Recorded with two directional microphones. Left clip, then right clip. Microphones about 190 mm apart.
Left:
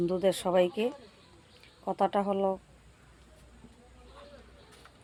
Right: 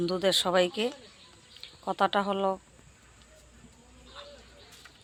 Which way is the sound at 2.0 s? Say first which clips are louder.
Right 1 dB; 5° left (ahead or behind).